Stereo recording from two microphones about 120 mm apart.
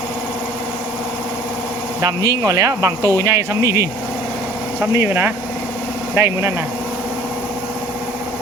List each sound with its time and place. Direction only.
2.0 s speech: 30° right (ahead or behind)